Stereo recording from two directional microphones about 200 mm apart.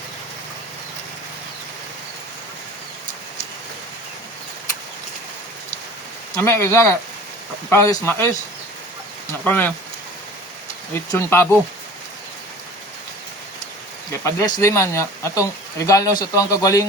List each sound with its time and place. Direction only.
6.3 s speech: 15° left (ahead or behind)
9.4 s speech: 10° left (ahead or behind)
11.1 s speech: 10° left (ahead or behind)
14.1 s speech: 15° left (ahead or behind)